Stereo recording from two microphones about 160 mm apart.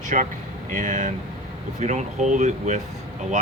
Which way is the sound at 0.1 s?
50° right (ahead or behind).